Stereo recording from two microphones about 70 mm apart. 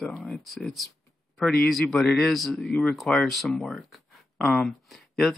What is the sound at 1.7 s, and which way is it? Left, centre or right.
Speech, centre.